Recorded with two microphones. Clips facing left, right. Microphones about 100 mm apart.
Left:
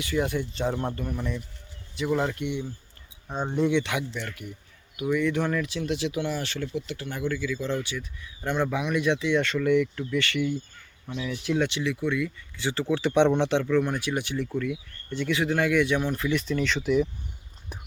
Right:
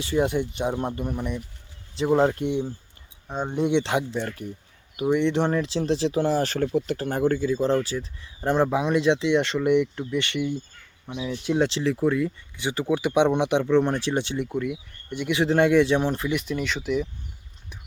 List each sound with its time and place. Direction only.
0.0 s speech: 25° right (ahead or behind)
2.0 s speech: 30° right (ahead or behind)
3.2 s speech: 10° right (ahead or behind)
3.7 s speech: 30° right (ahead or behind)
12.5 s speech: 15° right (ahead or behind); by 17.1 s centre (ahead or behind)